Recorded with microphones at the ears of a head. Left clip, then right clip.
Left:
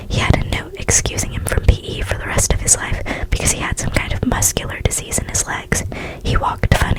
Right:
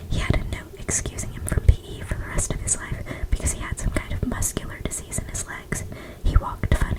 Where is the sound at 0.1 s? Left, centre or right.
Left.